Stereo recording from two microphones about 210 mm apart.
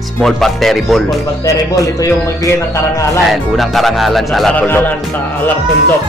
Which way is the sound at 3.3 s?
Centre (ahead or behind).